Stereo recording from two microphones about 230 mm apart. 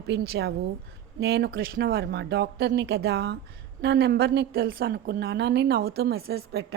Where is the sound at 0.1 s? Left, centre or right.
Right.